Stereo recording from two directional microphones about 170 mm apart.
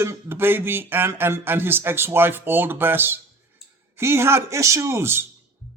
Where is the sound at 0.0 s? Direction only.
15° right (ahead or behind).